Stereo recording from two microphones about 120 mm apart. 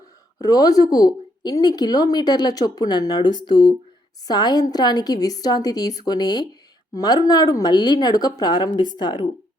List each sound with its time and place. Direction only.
0.4 s speech: 30° left (ahead or behind)